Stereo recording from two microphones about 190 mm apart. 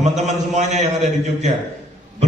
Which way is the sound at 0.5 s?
35° right (ahead or behind).